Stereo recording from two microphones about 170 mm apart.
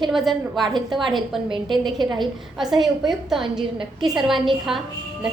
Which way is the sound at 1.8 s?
25° right (ahead or behind).